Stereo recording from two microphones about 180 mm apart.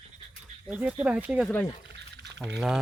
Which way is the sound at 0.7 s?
5° right (ahead or behind).